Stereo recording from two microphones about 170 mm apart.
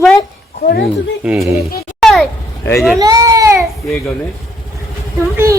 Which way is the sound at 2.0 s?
5° left (ahead or behind).